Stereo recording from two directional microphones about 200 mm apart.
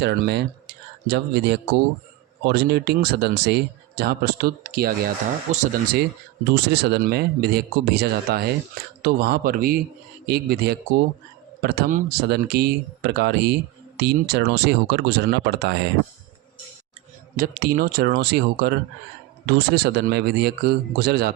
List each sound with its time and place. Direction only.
0.0 s speech: 55° right (ahead or behind)
6.5 s speech: 55° right (ahead or behind)
17.3 s speech: 45° right (ahead or behind)